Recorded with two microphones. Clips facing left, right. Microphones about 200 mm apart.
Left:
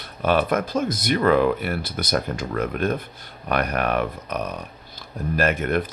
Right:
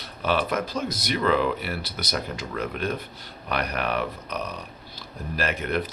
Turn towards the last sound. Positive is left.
turn(degrees=50)  # may be behind; listen again after turning